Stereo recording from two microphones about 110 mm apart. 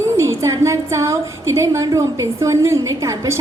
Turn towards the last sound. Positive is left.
turn(degrees=-30)  # may be behind; listen again after turning